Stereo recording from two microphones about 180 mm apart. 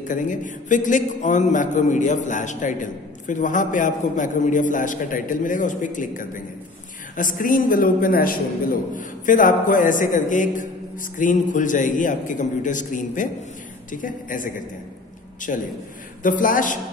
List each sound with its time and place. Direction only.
0.1 s a man's voice: 45° left (ahead or behind)